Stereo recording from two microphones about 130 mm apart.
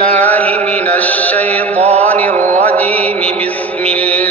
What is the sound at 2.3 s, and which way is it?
Music, 60° right (ahead or behind).